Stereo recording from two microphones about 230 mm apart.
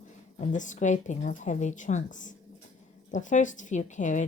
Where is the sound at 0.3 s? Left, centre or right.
Left.